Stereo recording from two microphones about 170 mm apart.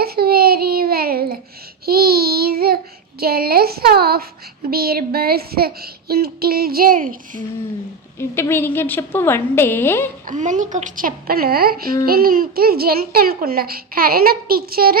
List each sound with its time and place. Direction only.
0.0 s a sound: 65° right (ahead or behind)
1.8 s child singing: 65° right (ahead or behind)
3.2 s a sound: 65° right (ahead or behind)
4.7 s speech: 60° right (ahead or behind)
8.2 s a woman's voice: 15° left (ahead or behind)
10.2 s a child's voice: 45° right (ahead or behind); by 14.9 s 60° right (ahead or behind)